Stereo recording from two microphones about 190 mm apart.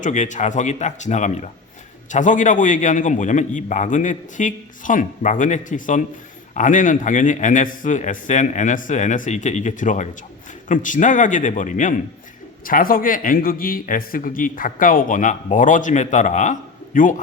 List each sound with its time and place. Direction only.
0.0 s a man's voice: 40° left (ahead or behind)